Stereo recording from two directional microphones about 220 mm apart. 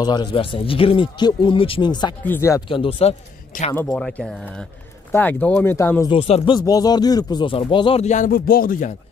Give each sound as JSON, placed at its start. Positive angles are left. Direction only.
{"t": 0.0, "sound": "speech", "side_deg": 20}
{"t": 2.7, "sound": "speech", "side_deg": 25}
{"t": 3.7, "sound": "speech", "side_deg": 10}
{"t": 6.1, "sound": "speech", "side_deg": 25}